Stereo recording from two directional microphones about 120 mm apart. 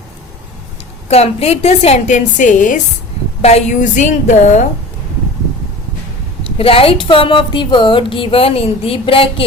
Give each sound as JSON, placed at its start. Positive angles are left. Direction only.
{"t": 1.0, "sound": "a woman's voice", "side_deg": 60}
{"t": 3.4, "sound": "a woman's voice", "side_deg": 75}
{"t": 6.6, "sound": "speech", "side_deg": 50}